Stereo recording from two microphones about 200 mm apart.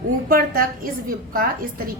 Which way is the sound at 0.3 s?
45° right (ahead or behind).